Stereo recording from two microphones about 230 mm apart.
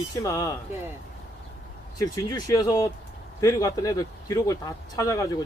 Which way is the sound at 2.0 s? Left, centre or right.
Centre.